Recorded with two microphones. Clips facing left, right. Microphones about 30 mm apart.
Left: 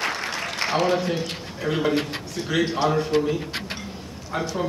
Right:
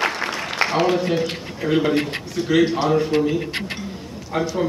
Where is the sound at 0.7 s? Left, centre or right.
Centre.